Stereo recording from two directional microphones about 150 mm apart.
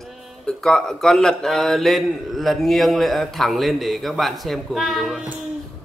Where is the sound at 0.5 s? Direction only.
5° left (ahead or behind).